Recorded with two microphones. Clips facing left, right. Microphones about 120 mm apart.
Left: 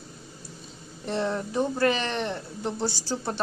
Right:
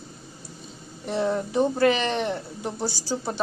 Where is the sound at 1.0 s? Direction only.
5° right (ahead or behind).